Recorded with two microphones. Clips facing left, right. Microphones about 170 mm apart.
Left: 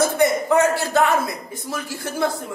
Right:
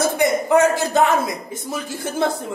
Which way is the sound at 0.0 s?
15° right (ahead or behind).